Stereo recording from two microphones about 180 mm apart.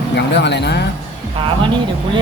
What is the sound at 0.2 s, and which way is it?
Speech, 70° left (ahead or behind).